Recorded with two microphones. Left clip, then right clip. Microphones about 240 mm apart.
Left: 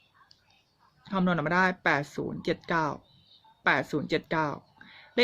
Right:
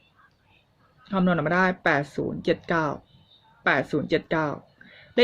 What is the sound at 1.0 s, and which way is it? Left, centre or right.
Speech, centre.